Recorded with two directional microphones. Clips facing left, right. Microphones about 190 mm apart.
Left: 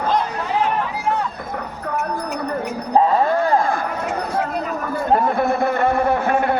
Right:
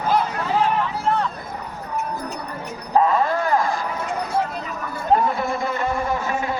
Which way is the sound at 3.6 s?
55° left (ahead or behind).